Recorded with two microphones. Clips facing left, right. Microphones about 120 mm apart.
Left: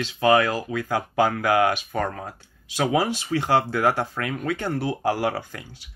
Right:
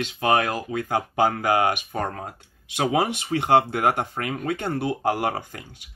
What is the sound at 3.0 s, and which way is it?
Speech, 60° right (ahead or behind).